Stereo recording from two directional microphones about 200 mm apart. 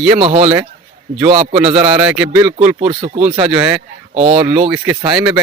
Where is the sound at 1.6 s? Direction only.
5° right (ahead or behind).